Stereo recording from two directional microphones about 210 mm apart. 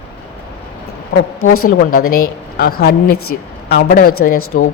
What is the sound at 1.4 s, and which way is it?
Speech, 90° left.